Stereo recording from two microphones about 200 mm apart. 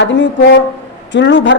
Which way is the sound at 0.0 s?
60° left (ahead or behind).